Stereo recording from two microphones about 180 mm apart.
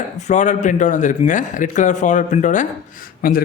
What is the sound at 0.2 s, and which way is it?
A man's voice, 40° left (ahead or behind).